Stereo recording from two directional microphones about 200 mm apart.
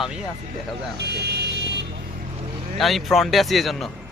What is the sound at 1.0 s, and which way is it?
Vehicle, 55° right (ahead or behind).